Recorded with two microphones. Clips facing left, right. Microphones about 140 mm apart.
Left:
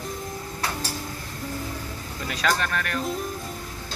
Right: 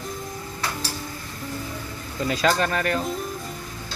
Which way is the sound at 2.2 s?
30° right (ahead or behind).